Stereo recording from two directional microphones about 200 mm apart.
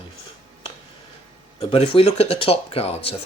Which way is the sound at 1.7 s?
30° left (ahead or behind).